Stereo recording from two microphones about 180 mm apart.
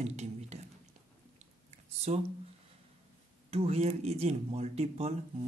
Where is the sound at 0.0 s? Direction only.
40° right (ahead or behind).